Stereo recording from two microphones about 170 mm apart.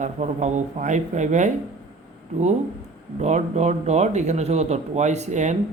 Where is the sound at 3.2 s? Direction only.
40° right (ahead or behind).